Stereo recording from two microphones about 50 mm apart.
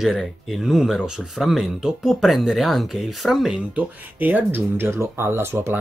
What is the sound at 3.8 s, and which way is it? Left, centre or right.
Speech, right.